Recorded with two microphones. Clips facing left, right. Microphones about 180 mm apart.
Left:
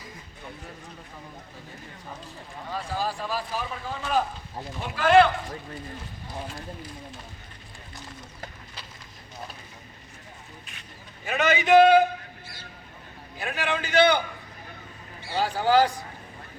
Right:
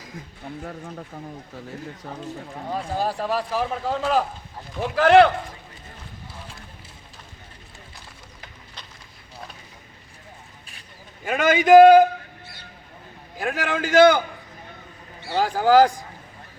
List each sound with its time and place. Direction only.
0.6 s speech: 60° right (ahead or behind)
3.0 s a man's voice: 65° right (ahead or behind)
11.3 s a man's voice: 50° right (ahead or behind)
13.4 s a man's voice: 45° right (ahead or behind)
15.4 s a man's voice: 45° right (ahead or behind)